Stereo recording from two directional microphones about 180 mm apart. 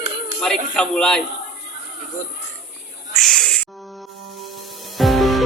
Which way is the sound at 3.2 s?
5° left (ahead or behind).